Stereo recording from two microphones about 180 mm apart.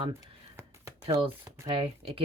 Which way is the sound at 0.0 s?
15° right (ahead or behind).